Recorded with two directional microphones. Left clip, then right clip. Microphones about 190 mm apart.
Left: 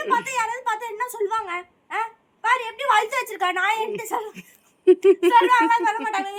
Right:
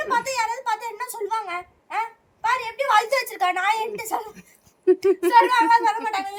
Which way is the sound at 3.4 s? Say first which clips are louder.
Left 1 dB; 15° right (ahead or behind).